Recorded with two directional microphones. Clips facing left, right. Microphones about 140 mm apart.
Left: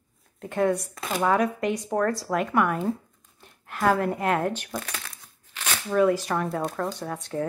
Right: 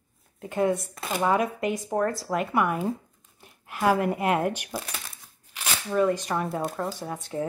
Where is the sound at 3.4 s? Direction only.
5° right (ahead or behind).